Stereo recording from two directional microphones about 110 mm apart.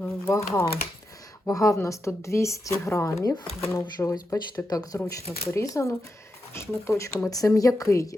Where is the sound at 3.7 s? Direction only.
30° left (ahead or behind).